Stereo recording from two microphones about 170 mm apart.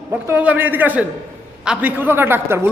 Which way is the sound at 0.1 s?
10° right (ahead or behind).